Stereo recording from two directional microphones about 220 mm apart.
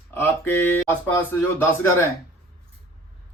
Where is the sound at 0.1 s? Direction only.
10° left (ahead or behind).